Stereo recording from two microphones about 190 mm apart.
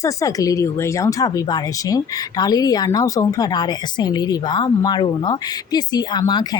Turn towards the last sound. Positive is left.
turn(degrees=20)  # may be behind; listen again after turning